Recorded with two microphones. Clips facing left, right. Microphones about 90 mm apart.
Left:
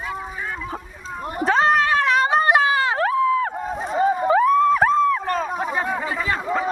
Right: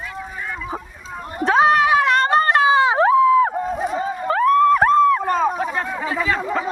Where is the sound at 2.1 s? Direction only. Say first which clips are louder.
Right 1 dB; 5° left (ahead or behind).